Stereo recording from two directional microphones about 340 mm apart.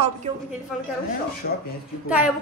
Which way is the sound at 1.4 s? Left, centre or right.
Left.